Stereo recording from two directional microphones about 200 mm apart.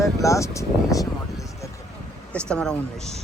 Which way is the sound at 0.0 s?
15° left (ahead or behind).